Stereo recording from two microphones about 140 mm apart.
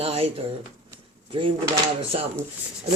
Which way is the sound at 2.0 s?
40° right (ahead or behind).